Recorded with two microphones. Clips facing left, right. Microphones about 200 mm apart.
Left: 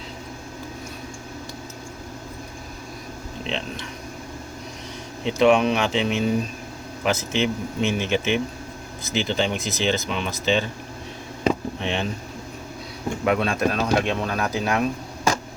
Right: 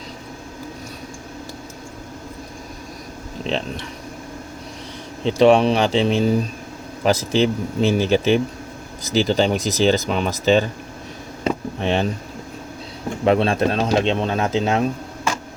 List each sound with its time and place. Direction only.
3.5 s speech: 40° right (ahead or behind)
5.2 s speech: 35° right (ahead or behind)
11.8 s speech: 40° right (ahead or behind)
13.2 s speech: 30° right (ahead or behind)
15.3 s a sound: 40° left (ahead or behind)